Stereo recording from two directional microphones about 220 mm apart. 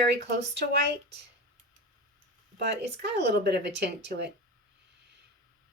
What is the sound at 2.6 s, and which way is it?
Speech, 50° right (ahead or behind).